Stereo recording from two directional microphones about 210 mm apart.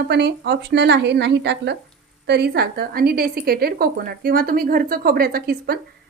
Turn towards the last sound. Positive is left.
turn(degrees=-45)  # may be behind; listen again after turning